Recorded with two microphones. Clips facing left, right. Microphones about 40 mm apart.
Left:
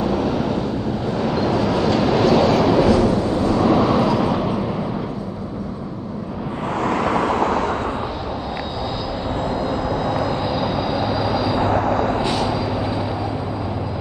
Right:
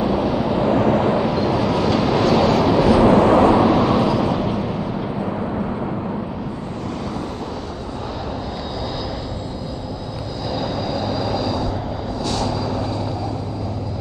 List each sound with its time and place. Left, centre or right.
0.0 s vehicle: centre
0.7 s vehicle: right
1.2 s train: centre
3.1 s vehicle: right
3.6 s vehicle: centre
10.6 s vehicle: centre